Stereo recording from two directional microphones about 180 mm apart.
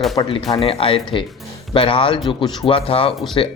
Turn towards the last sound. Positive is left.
turn(degrees=30)  # may be behind; listen again after turning